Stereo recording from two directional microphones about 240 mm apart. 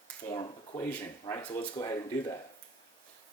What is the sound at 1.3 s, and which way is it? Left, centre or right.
Speech, centre.